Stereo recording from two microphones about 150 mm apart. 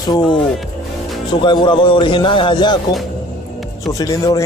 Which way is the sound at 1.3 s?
30° left (ahead or behind).